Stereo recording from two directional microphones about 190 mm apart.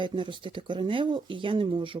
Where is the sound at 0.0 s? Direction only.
25° right (ahead or behind).